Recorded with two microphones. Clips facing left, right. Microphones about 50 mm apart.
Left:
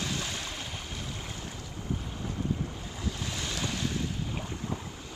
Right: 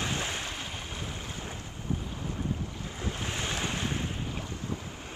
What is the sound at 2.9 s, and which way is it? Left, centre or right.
Wind, right.